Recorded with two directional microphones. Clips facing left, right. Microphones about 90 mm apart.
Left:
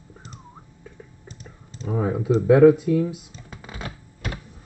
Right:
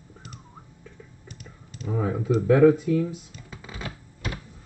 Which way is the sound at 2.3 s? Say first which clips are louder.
Left 3 dB; 30° left (ahead or behind).